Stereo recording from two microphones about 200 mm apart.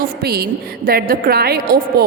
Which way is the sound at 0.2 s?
50° right (ahead or behind).